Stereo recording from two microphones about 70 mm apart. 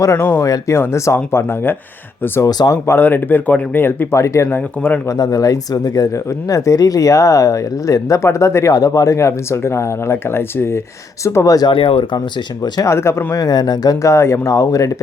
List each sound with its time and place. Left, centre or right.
0.2 s speech: left
0.4 s speech: left
2.5 s speech: left
2.8 s speech: left
4.4 s speech: left
5.1 s speech: left
8.7 s speech: left
11.4 s speech: left
12.8 s speech: left
13.3 s speech: left
14.0 s speech: left